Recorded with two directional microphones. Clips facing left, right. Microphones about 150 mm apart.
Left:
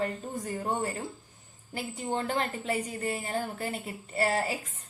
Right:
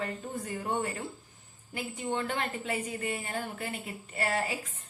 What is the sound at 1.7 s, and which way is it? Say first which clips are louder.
A woman's voice: left 1 dB; 35° left (ahead or behind).